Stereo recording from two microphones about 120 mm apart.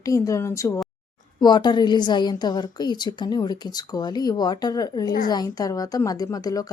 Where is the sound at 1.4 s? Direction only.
35° left (ahead or behind).